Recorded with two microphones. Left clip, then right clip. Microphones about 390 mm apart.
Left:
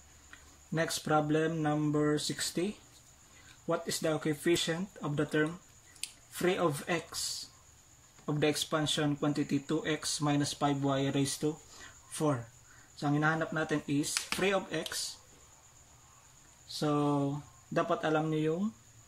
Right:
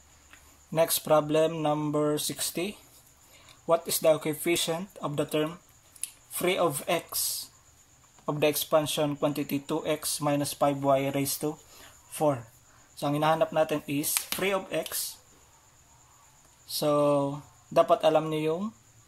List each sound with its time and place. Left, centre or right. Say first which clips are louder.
0.7 s speech: right 7 dB; centre
8.3 s speech: right 6 dB; centre
16.6 s speech: right 7 dB; centre